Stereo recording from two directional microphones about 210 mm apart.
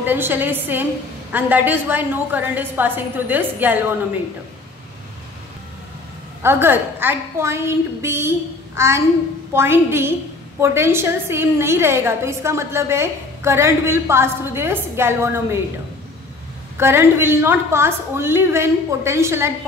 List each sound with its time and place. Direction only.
0.0 s a woman's voice: 10° right (ahead or behind)
6.4 s a woman's voice: 10° right (ahead or behind)
16.7 s a woman's voice: 10° right (ahead or behind)